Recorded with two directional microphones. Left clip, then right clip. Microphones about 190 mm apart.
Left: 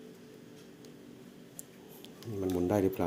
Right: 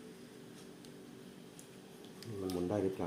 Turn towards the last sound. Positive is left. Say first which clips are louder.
# left 6 dB
turn(degrees=45)  # may be behind; listen again after turning